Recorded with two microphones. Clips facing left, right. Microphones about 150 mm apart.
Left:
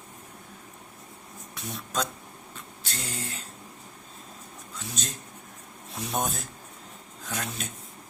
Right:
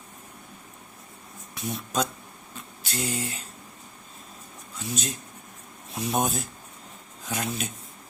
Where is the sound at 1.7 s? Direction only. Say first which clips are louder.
Right 3 dB; 10° right (ahead or behind).